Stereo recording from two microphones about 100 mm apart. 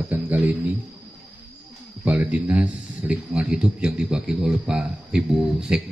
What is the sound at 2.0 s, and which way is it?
A man's voice, 15° right (ahead or behind).